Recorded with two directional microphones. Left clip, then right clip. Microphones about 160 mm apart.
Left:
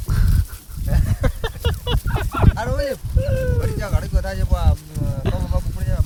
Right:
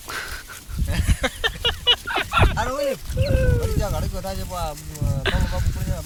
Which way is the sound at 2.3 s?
5° left (ahead or behind).